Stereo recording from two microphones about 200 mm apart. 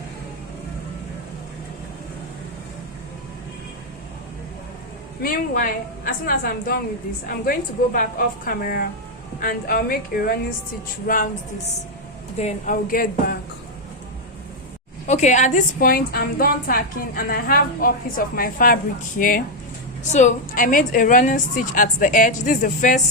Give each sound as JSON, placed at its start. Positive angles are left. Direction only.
{"t": 5.2, "sound": "a woman's voice", "side_deg": 45}
{"t": 12.4, "sound": "a woman's voice", "side_deg": 35}
{"t": 15.0, "sound": "a woman's voice", "side_deg": 35}